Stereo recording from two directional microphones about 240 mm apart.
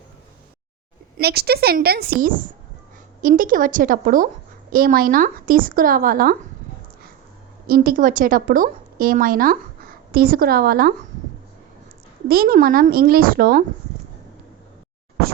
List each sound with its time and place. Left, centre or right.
1.1 s a woman's voice: right
7.7 s a woman's voice: right
12.3 s a woman's voice: right